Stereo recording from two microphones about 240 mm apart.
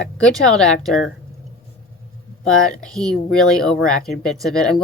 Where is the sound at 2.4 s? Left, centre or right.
Centre.